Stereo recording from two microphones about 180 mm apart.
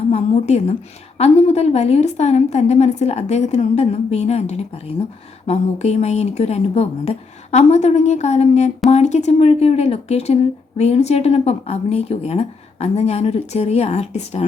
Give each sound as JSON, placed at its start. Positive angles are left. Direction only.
{"t": 0.1, "sound": "speech", "side_deg": 35}